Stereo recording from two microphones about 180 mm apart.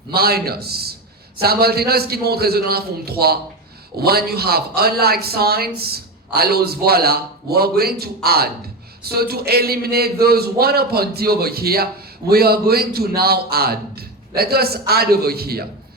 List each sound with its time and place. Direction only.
0.1 s speech: 60° right (ahead or behind)